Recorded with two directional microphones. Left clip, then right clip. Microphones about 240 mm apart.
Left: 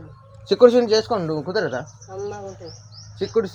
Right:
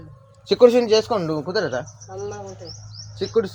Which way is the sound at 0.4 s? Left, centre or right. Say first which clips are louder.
Even; centre.